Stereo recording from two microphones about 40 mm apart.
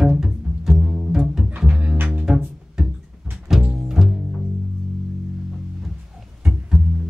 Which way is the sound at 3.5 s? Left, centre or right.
Centre.